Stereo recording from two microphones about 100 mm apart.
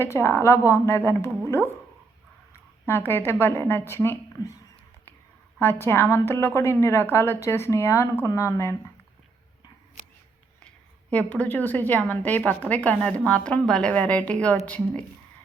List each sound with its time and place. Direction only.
0.0 s a woman's voice: 25° left (ahead or behind)
5.5 s a woman's voice: 25° left (ahead or behind)
11.1 s a woman's voice: 15° left (ahead or behind)